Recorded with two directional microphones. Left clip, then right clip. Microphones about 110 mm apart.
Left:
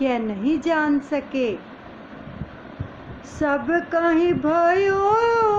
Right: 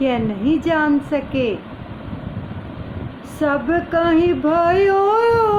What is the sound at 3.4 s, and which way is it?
Female singing, 65° left (ahead or behind).